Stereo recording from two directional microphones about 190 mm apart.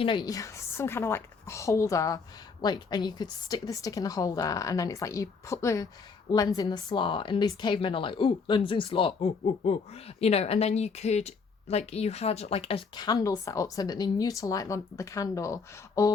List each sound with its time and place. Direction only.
0.0 s a woman's voice: 25° left (ahead or behind)